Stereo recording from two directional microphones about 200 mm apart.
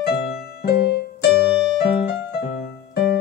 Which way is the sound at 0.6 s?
50° left (ahead or behind).